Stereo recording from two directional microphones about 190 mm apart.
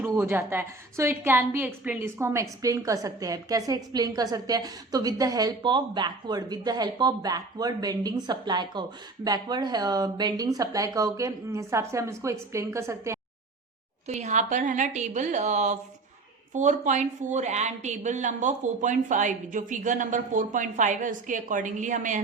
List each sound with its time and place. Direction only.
0.0 s a woman's voice: 10° right (ahead or behind)
14.1 s a woman's voice: 40° right (ahead or behind)